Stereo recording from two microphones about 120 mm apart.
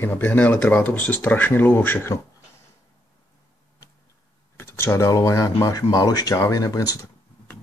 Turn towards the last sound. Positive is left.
turn(degrees=30)  # may be behind; listen again after turning